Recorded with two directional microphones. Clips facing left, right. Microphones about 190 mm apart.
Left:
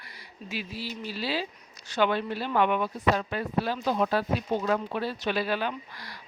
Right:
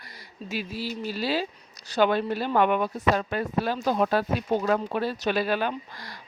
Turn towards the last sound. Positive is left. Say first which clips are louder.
# right 3 dB
turn(degrees=-45)  # may be behind; listen again after turning